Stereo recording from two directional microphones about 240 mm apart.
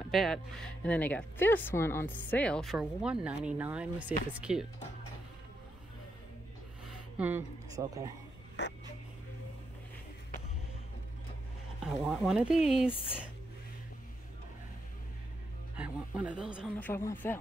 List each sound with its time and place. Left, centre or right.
0.1 s speech: centre
7.2 s speech: centre
8.6 s speech: left
11.8 s speech: centre
15.7 s speech: centre
16.8 s speech: centre